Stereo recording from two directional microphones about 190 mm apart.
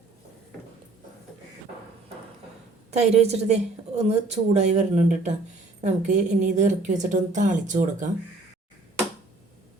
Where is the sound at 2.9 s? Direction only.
35° right (ahead or behind).